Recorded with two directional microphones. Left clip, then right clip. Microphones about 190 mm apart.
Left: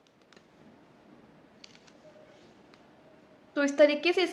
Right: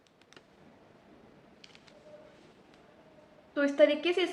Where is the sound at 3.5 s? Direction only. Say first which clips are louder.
Left 2 dB; 20° left (ahead or behind).